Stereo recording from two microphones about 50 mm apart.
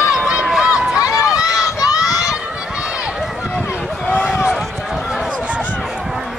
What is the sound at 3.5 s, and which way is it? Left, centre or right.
Vehicle, centre.